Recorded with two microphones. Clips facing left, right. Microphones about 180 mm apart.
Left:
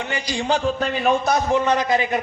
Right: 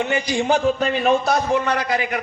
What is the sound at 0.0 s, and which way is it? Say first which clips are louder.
Speech: right 5 dB; 20° right (ahead or behind).